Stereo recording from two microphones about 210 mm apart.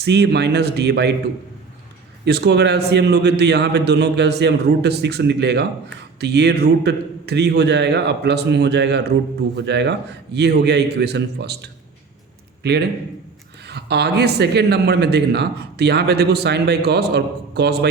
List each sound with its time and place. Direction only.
0.0 s a man's voice: 55° right (ahead or behind)
2.2 s a man's voice: 55° right (ahead or behind)